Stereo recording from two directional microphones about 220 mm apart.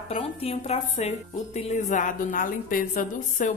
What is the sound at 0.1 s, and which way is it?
A woman's voice, 25° left (ahead or behind).